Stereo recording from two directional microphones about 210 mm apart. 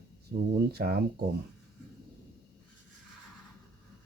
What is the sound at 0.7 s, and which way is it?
Speech, 45° right (ahead or behind).